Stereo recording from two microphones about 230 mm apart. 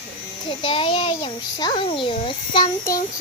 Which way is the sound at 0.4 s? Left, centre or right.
Left.